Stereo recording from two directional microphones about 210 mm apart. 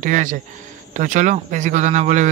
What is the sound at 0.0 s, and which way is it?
Speech, 40° right (ahead or behind).